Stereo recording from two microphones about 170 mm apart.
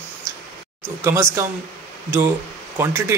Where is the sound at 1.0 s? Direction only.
15° right (ahead or behind).